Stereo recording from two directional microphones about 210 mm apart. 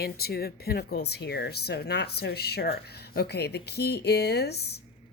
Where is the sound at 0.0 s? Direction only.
50° left (ahead or behind).